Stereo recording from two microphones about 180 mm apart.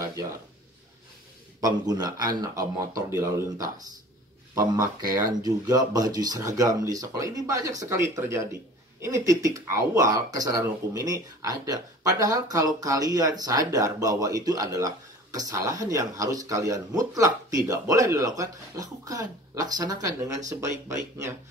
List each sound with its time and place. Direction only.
1.6 s speech: 20° right (ahead or behind)